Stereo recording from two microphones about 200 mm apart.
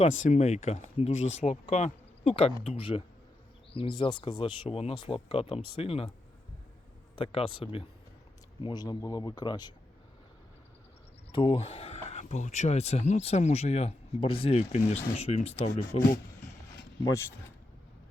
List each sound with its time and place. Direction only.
0.0 s speech: 40° left (ahead or behind)
7.2 s speech: 25° left (ahead or behind)
11.3 s speech: 25° left (ahead or behind)
17.0 s speech: 15° left (ahead or behind)